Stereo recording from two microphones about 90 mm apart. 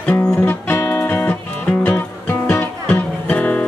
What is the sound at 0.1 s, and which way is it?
Music, 25° left (ahead or behind).